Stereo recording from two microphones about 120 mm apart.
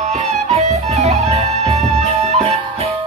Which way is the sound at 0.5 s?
65° right (ahead or behind).